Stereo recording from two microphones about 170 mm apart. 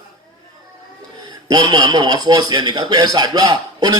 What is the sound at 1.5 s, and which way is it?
A man's voice, 25° right (ahead or behind).